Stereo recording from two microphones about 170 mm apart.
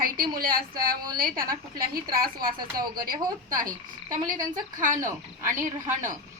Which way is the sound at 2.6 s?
25° right (ahead or behind).